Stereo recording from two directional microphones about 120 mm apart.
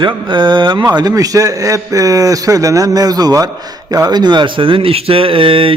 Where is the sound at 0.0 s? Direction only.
40° right (ahead or behind).